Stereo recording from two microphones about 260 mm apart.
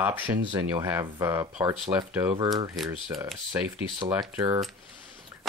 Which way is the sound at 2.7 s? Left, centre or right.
Centre.